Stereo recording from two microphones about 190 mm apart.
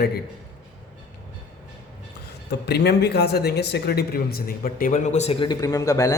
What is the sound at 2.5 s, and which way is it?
Speech, 60° left (ahead or behind).